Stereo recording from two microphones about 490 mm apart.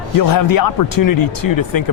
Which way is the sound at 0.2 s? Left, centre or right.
Left.